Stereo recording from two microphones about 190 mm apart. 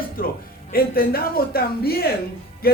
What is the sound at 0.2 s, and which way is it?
A man's voice, 50° left (ahead or behind).